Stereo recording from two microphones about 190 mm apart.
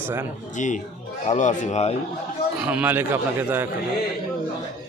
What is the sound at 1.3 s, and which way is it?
Speech, 40° left (ahead or behind).